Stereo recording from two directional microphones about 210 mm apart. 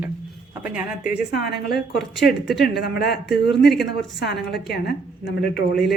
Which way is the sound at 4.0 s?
55° left (ahead or behind).